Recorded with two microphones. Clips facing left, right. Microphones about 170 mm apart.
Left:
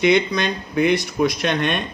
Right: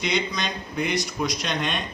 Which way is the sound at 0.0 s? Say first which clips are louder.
Left 9 dB; 60° left (ahead or behind).